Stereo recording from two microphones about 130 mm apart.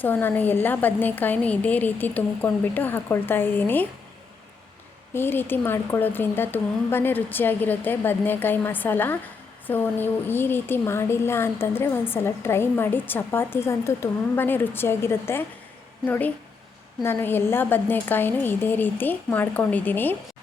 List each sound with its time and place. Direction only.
0.0 s speech: 15° left (ahead or behind)
5.1 s speech: 15° left (ahead or behind)